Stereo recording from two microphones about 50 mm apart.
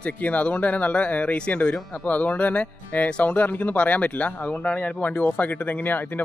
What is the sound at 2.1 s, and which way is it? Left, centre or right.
Speech, left.